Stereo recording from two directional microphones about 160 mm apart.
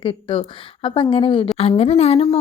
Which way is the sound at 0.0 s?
30° left (ahead or behind).